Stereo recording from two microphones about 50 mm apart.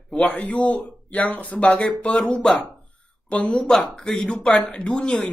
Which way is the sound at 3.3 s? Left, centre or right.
Left.